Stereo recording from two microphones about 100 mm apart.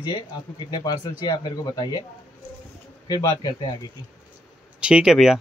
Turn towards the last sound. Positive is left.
turn(degrees=-5)  # may be behind; listen again after turning